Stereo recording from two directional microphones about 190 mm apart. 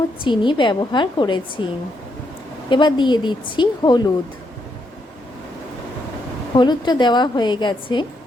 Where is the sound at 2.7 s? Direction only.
25° left (ahead or behind).